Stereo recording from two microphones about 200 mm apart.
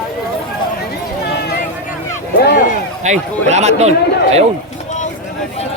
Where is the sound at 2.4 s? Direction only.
55° left (ahead or behind).